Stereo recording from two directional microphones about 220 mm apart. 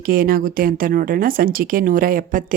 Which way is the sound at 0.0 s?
40° right (ahead or behind).